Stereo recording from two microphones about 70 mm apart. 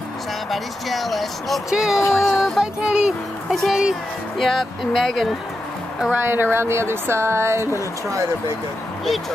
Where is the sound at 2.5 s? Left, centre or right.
Centre.